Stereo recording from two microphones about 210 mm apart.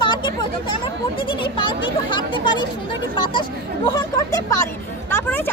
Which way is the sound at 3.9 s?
15° left (ahead or behind).